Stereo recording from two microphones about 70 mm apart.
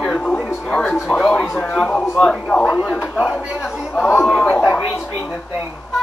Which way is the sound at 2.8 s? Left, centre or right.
Centre.